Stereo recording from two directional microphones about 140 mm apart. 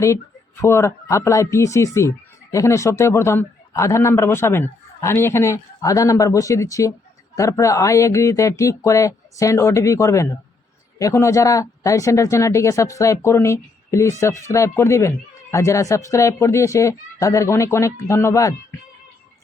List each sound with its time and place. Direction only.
0.6 s speech: 20° left (ahead or behind)